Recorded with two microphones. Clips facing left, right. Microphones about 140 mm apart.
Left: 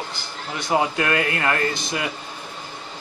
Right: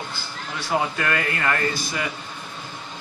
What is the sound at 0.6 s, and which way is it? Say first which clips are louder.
Speech: left 3 dB; 15° left (ahead or behind).